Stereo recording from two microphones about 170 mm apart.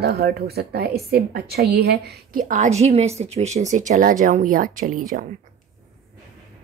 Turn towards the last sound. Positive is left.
turn(degrees=-50)  # may be behind; listen again after turning